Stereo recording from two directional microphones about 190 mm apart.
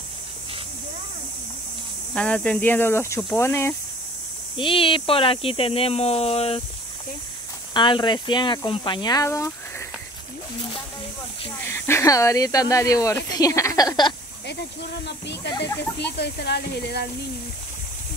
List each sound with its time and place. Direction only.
2.1 s speech: 5° left (ahead or behind)
4.6 s speech: 25° left (ahead or behind)
7.7 s speech: 25° left (ahead or behind)
11.6 s speech: 10° left (ahead or behind)
14.4 s speech: 65° left (ahead or behind)